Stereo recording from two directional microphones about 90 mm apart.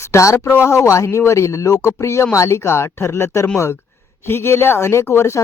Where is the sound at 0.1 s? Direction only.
35° left (ahead or behind).